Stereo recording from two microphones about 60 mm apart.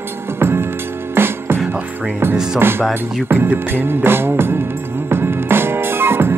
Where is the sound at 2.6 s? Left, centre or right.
Right.